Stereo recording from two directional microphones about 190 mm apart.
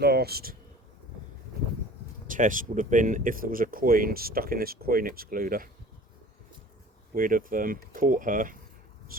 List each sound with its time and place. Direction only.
0.0 s speech: 55° right (ahead or behind)
2.2 s speech: 45° right (ahead or behind)
7.1 s speech: 45° right (ahead or behind)